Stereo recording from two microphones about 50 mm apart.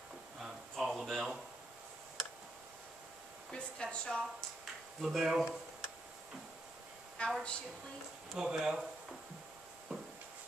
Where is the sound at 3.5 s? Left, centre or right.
Centre.